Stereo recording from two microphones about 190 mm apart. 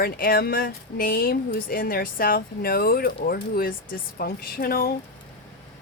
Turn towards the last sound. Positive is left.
turn(degrees=50)  # may be behind; listen again after turning